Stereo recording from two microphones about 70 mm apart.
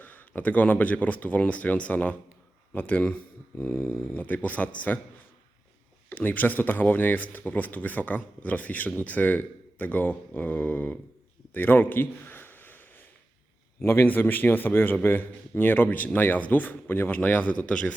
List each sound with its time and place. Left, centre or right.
0.0 s speech: left
3.6 s speech: left
6.1 s speech: left
11.5 s a sound: left
13.8 s speech: left; by 17.9 s centre